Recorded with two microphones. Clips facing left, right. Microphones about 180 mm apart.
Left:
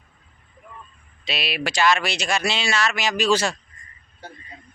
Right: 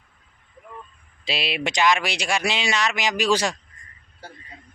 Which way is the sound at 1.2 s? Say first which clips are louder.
Right 1 dB; 25° right (ahead or behind).